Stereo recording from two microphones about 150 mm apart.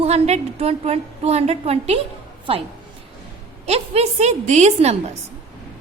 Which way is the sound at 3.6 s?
45° right (ahead or behind).